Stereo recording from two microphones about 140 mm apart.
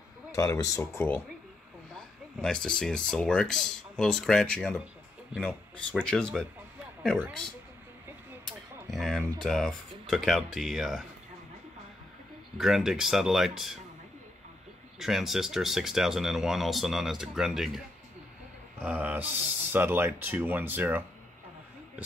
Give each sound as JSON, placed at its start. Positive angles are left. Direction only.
{"t": 0.3, "sound": "speech", "side_deg": 25}
{"t": 2.0, "sound": "speech", "side_deg": 5}
{"t": 8.5, "sound": "a sound", "side_deg": 0}
{"t": 9.4, "sound": "speech", "side_deg": 5}
{"t": 12.5, "sound": "speech", "side_deg": 0}
{"t": 15.0, "sound": "speech", "side_deg": 0}